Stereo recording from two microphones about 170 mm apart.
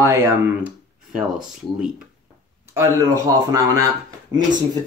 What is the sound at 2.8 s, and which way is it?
Speech, 20° right (ahead or behind).